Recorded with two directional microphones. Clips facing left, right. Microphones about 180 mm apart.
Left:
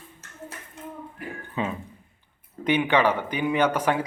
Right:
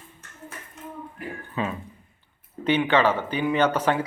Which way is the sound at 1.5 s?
20° left (ahead or behind).